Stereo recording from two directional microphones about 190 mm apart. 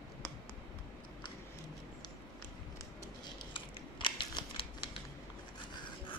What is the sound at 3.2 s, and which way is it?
Scissors, 25° left (ahead or behind).